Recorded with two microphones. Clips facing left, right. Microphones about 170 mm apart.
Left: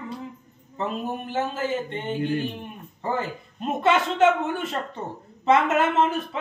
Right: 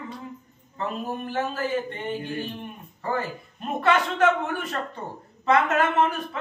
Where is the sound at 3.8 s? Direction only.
20° left (ahead or behind).